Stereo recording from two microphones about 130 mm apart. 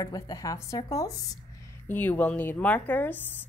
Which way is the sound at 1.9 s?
15° left (ahead or behind).